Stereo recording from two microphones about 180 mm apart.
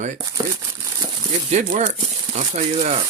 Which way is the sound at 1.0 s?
35° right (ahead or behind).